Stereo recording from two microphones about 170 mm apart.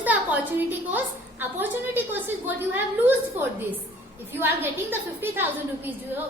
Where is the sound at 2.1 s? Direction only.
10° right (ahead or behind).